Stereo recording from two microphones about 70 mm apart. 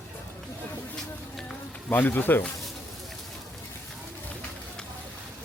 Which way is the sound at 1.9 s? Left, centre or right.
Left.